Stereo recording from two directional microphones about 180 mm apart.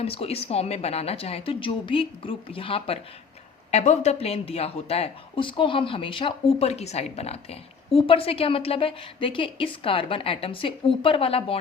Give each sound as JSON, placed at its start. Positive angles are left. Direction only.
{"t": 0.0, "sound": "speech", "side_deg": 30}